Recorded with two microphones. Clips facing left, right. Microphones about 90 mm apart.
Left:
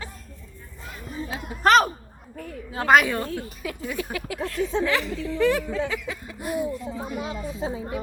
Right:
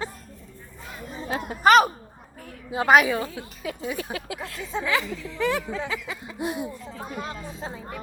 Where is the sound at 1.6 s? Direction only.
5° right (ahead or behind); by 4.4 s 25° right (ahead or behind).